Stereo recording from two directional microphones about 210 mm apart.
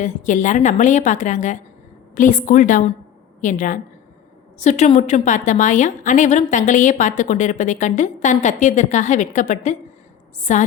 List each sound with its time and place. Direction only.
0.0 s a woman's voice: 35° left (ahead or behind)